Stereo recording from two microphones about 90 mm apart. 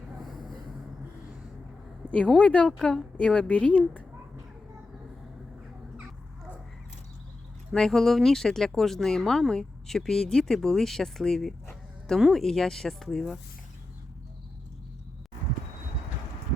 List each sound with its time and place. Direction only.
2.0 s speech: 15° left (ahead or behind)
7.7 s speech: 5° left (ahead or behind)